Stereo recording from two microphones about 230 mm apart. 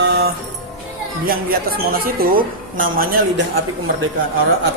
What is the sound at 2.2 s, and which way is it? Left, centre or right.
Speech, right.